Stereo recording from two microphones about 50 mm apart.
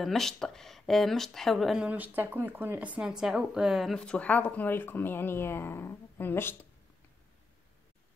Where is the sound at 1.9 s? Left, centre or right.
Right.